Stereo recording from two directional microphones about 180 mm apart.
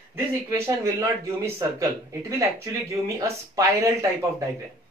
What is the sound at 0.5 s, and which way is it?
Speech, 15° right (ahead or behind).